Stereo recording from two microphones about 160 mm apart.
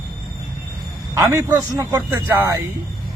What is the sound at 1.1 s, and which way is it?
A man's voice, 20° right (ahead or behind).